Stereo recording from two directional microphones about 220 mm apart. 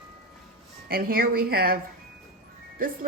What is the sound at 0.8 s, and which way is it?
Speech, 40° right (ahead or behind).